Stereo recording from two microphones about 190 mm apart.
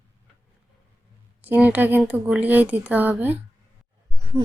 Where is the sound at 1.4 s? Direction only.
10° right (ahead or behind).